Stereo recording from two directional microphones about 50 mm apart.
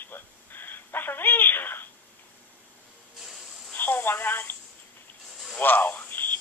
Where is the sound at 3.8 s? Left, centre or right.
Left.